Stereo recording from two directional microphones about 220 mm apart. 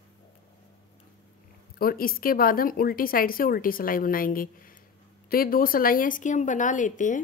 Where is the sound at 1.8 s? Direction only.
40° left (ahead or behind).